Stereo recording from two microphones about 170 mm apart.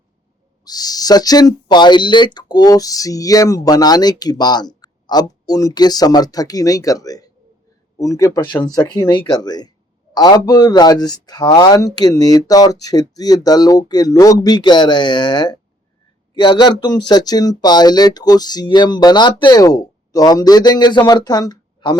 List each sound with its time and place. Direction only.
0.6 s speech: 20° left (ahead or behind)